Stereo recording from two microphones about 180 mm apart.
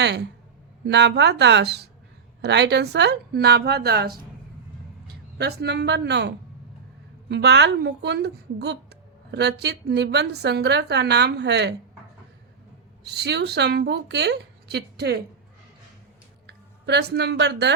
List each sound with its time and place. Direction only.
0.0 s a woman's voice: 70° right (ahead or behind)
5.4 s a woman's voice: 65° right (ahead or behind)
13.1 s a woman's voice: 65° right (ahead or behind)
16.5 s speech: 70° right (ahead or behind)